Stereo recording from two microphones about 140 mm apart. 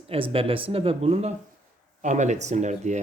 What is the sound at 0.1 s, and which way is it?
Speech, 40° right (ahead or behind).